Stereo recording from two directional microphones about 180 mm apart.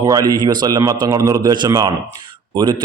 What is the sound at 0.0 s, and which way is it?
A man's voice, 20° right (ahead or behind).